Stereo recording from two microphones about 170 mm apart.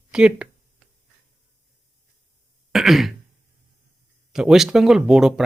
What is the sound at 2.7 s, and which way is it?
Speech, centre (ahead or behind).